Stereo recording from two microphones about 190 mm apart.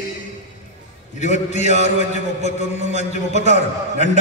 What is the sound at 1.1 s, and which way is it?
Speech, 40° left (ahead or behind).